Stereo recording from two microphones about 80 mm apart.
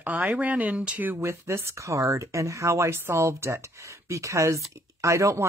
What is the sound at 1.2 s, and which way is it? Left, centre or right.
Speech, right.